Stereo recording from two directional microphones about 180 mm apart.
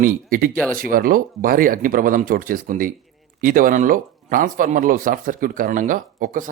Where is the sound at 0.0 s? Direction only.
50° right (ahead or behind).